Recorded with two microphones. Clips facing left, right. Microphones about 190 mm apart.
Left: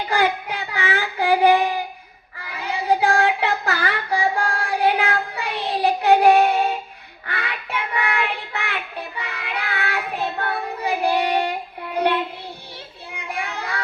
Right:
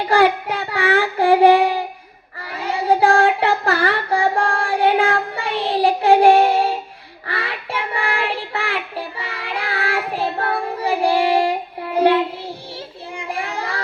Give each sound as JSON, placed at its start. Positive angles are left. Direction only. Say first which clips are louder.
{"t": 0.0, "sound": "child singing", "louder": "right 5 dB", "side_deg": -35}
{"t": 4.7, "sound": "music", "louder": "right 3 dB", "side_deg": -30}
{"t": 5.4, "sound": "child singing", "louder": "right 4 dB", "side_deg": -30}
{"t": 13.6, "sound": "a sound", "louder": "right 3 dB", "side_deg": -30}